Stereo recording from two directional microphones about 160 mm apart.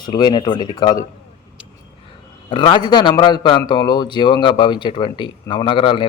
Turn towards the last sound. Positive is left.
turn(degrees=30)  # may be behind; listen again after turning